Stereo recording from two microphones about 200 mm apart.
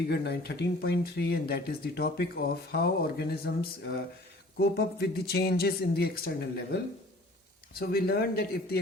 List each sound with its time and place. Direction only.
0.1 s speech: 55° left (ahead or behind)